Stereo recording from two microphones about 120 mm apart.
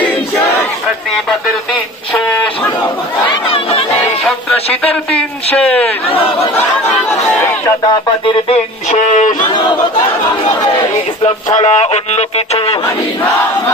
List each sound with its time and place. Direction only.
0.0 s battle cry: 15° left (ahead or behind)
3.3 s chatter: 45° left (ahead or behind)
5.6 s a sound: 10° left (ahead or behind)
6.1 s chatter: 50° left (ahead or behind)
7.1 s a sound: 25° left (ahead or behind)
8.9 s music: 90° left
9.5 s speech: 40° left (ahead or behind)
11.2 s speech: 70° left (ahead or behind)